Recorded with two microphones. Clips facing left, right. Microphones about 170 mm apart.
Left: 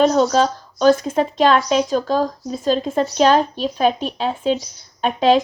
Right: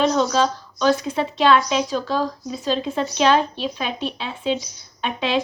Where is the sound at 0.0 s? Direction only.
40° left (ahead or behind).